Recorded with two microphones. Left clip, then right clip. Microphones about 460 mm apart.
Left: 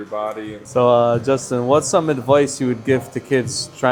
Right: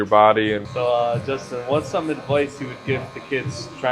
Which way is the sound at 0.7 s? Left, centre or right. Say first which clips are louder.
Left 8 dB; left.